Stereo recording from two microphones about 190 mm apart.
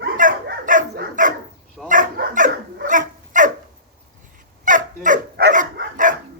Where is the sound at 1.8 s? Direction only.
45° right (ahead or behind).